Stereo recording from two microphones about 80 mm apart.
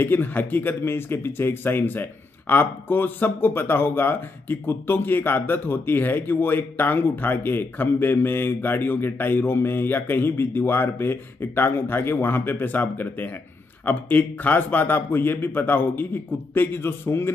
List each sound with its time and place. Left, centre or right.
0.0 s speech: left